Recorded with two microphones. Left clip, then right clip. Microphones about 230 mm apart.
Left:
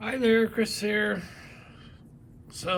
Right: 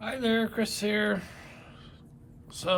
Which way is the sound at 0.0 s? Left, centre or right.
Centre.